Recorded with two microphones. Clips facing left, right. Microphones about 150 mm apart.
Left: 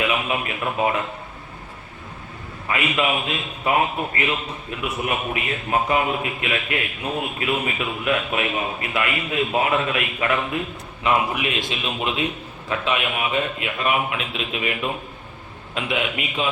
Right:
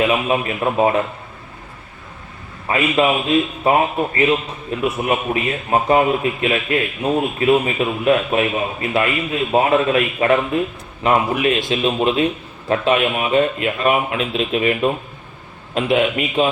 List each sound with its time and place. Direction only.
0.0 s a man's voice: 35° right (ahead or behind)
2.6 s a man's voice: 35° right (ahead or behind)